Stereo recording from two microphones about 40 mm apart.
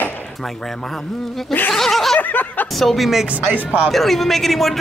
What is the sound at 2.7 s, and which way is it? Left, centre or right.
Speech, centre.